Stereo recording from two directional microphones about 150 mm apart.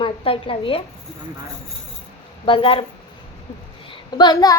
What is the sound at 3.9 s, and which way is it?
Speech, 30° left (ahead or behind).